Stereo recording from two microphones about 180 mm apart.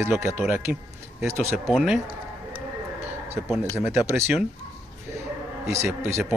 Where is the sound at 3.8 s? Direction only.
15° right (ahead or behind).